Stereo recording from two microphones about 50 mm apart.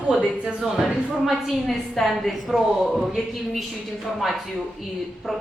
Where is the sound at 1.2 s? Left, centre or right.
Centre.